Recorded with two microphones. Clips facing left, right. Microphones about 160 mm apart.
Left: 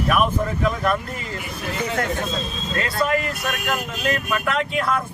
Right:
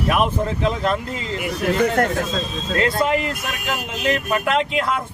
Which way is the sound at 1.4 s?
70° right (ahead or behind).